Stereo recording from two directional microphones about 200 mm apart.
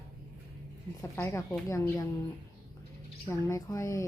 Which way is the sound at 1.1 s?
15° left (ahead or behind).